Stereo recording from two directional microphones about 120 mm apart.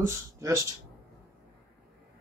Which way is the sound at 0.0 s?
25° right (ahead or behind).